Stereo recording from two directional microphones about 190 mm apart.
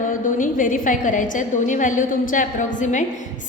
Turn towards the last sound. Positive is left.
turn(degrees=40)  # may be behind; listen again after turning